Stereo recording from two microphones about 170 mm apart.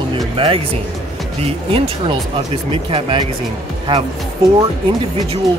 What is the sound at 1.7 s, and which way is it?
Speech, 35° right (ahead or behind).